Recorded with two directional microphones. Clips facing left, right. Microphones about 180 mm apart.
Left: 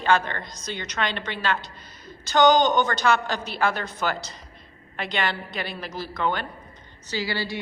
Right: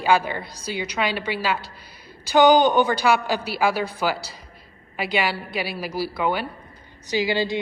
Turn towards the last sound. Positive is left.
turn(degrees=-20)  # may be behind; listen again after turning